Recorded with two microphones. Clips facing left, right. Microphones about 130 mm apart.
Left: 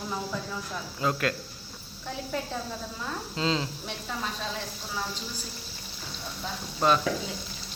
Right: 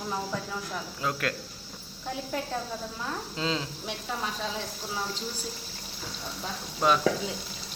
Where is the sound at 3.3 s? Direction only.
Centre (ahead or behind).